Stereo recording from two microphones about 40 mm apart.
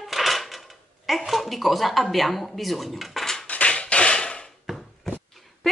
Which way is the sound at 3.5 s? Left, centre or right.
Left.